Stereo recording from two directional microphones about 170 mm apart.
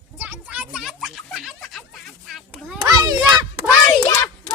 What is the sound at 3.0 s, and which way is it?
Speech, 25° right (ahead or behind).